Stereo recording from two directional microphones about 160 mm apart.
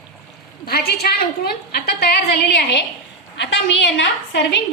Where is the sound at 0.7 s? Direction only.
75° left (ahead or behind).